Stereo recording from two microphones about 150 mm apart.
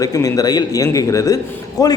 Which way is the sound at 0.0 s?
25° left (ahead or behind).